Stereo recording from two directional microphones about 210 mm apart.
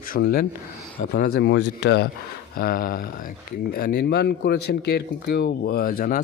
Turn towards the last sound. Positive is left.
turn(degrees=45)  # may be behind; listen again after turning